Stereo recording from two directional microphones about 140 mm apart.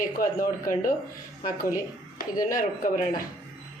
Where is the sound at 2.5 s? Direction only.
75° left (ahead or behind).